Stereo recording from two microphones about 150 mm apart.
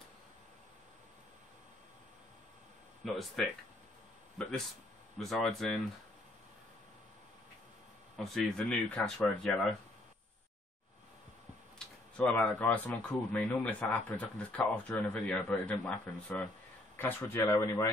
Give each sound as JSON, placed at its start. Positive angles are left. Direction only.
{"t": 3.4, "sound": "speech", "side_deg": 0}
{"t": 5.2, "sound": "speech", "side_deg": 0}
{"t": 8.2, "sound": "speech", "side_deg": 5}
{"t": 11.8, "sound": "tick-tock", "side_deg": 5}
{"t": 12.2, "sound": "speech", "side_deg": 10}